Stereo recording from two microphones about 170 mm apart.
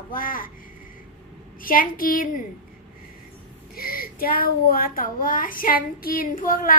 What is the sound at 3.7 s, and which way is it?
A woman's voice, 60° left (ahead or behind).